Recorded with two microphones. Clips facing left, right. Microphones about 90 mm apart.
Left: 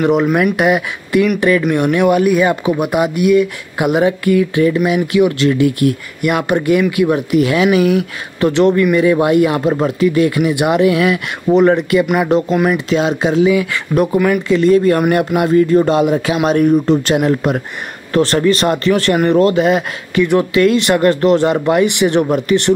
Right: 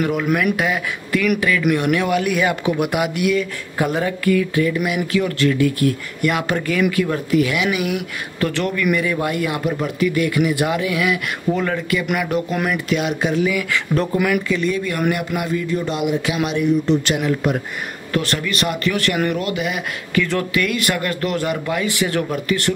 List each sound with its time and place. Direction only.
0.0 s speech: 25° left (ahead or behind)
1.4 s speech: 35° left (ahead or behind)
1.8 s speech: 20° left (ahead or behind)
2.0 s speech: 30° left (ahead or behind)
3.3 s speech: 15° left (ahead or behind)
7.4 s speech: 40° left (ahead or behind)
8.4 s speech: 25° left (ahead or behind)
10.9 s speech: 35° left (ahead or behind)
11.5 s speech: 25° left (ahead or behind)
14.2 s speech: 35° left (ahead or behind)
20.2 s speech: 20° left (ahead or behind)